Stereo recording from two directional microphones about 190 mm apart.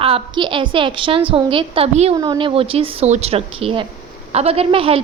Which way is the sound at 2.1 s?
20° right (ahead or behind).